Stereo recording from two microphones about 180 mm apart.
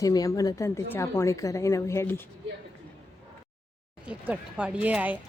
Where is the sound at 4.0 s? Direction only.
5° right (ahead or behind).